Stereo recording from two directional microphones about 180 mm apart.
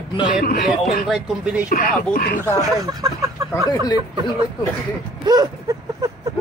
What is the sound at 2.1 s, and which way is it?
Speech, 50° left (ahead or behind).